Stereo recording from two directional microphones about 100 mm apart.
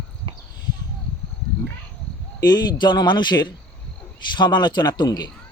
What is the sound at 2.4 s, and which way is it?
A man's voice, 45° left (ahead or behind).